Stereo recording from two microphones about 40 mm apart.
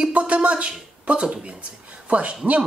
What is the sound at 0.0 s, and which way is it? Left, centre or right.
Speech, right.